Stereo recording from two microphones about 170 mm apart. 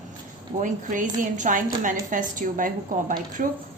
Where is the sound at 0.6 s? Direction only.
50° right (ahead or behind).